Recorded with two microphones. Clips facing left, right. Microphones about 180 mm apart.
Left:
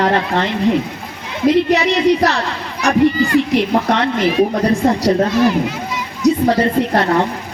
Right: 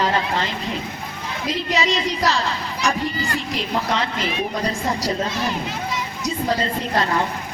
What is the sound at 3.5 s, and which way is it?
A woman's voice, 60° left (ahead or behind).